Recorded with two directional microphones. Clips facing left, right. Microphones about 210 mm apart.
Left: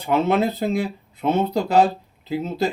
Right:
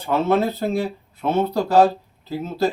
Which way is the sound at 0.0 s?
15° left (ahead or behind).